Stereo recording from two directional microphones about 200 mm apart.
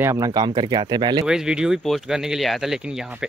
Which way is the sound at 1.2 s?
5° right (ahead or behind).